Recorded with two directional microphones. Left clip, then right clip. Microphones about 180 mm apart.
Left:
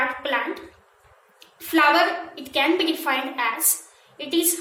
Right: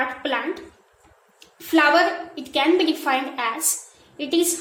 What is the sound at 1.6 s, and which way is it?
A woman's voice, 60° right (ahead or behind).